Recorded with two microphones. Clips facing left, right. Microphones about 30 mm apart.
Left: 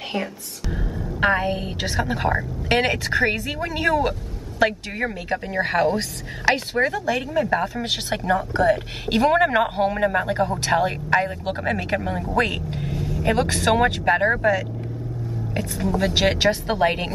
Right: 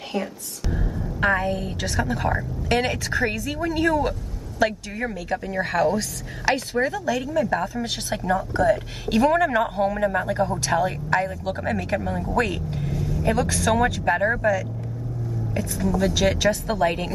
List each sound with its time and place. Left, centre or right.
0.1 s whispering: left
1.2 s a woman's voice: left
4.6 s a woman's voice: left
12.4 s speech: left
13.3 s a woman's voice: left